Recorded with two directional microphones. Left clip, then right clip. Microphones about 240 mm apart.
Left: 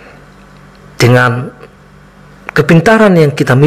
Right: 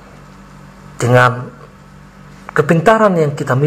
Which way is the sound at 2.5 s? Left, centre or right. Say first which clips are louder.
Left 3 dB; left.